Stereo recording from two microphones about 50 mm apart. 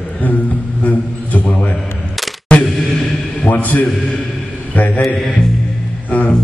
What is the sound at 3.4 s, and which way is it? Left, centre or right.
A man's voice, left.